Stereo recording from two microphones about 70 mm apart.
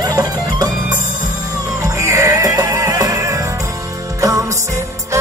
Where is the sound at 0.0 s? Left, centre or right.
Right.